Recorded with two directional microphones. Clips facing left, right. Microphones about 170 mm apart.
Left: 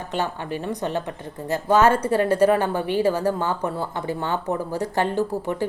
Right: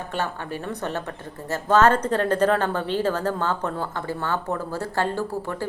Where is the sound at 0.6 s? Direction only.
15° left (ahead or behind).